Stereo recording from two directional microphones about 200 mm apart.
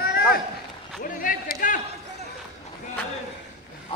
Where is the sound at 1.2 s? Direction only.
45° left (ahead or behind).